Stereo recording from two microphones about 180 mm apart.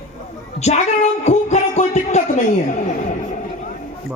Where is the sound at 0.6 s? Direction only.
40° left (ahead or behind).